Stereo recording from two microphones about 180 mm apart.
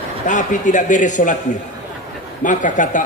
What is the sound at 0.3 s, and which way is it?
A man's voice, 45° left (ahead or behind).